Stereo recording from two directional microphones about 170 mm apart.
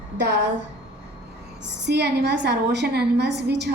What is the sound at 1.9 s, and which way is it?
A woman's voice, 80° right.